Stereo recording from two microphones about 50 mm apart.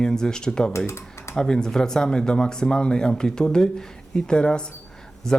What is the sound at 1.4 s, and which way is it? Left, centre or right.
Speech, centre.